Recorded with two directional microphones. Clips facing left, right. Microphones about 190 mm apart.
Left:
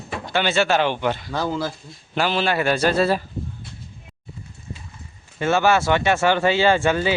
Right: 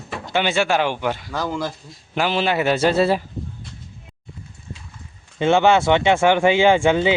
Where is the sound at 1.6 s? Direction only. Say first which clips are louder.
Even; 15° right (ahead or behind).